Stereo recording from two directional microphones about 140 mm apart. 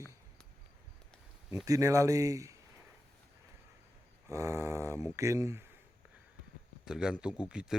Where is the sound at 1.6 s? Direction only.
20° right (ahead or behind).